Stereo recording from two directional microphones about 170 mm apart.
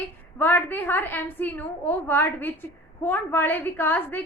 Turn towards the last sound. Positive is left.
turn(degrees=10)  # may be behind; listen again after turning